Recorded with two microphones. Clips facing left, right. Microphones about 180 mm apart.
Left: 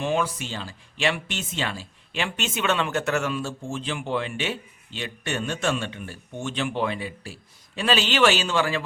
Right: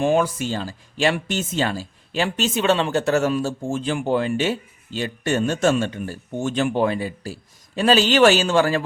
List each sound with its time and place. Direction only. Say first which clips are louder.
0.0 s a man's voice: right 6 dB; 45° right (ahead or behind)